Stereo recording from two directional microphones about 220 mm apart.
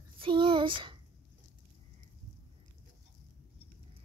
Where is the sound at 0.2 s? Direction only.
20° right (ahead or behind).